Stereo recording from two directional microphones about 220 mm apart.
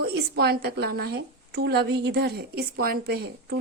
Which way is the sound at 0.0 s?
45° right (ahead or behind).